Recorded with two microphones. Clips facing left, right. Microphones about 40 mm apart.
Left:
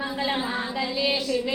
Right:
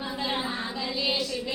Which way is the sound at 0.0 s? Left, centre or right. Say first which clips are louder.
Left 4 dB; left.